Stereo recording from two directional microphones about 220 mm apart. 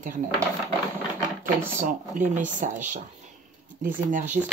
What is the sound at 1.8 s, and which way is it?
Speech, 35° right (ahead or behind).